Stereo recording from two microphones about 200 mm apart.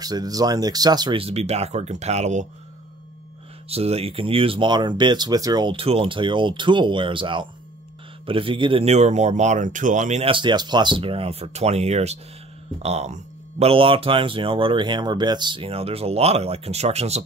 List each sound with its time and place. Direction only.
0.0 s speech: 20° right (ahead or behind); by 2.4 s 35° right (ahead or behind)
3.6 s speech: 30° right (ahead or behind)